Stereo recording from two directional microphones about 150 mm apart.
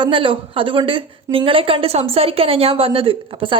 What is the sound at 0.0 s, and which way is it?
A woman's voice, 35° right (ahead or behind).